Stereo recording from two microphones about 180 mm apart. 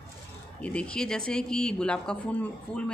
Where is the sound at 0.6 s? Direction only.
5° left (ahead or behind).